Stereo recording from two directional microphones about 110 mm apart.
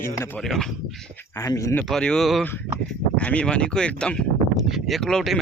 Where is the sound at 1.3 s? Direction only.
30° left (ahead or behind).